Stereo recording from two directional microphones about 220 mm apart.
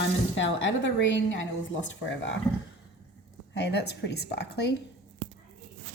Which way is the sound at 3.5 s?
50° left (ahead or behind).